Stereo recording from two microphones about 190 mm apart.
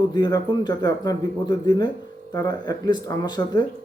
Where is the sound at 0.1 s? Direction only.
20° left (ahead or behind).